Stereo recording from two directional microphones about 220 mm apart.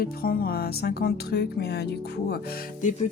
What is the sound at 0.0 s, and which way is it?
Speech, 45° left (ahead or behind).